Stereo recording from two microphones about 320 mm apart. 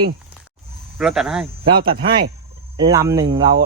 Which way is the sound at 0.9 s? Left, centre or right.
Centre.